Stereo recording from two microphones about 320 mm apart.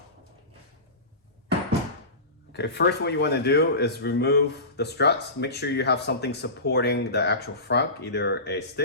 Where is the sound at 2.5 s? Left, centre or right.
Left.